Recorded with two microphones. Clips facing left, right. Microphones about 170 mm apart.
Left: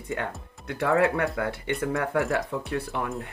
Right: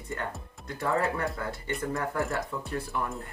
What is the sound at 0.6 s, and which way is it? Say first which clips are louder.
Speech: left 6 dB; 65° left (ahead or behind).